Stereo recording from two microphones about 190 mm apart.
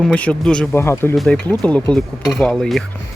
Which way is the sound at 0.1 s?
5° left (ahead or behind).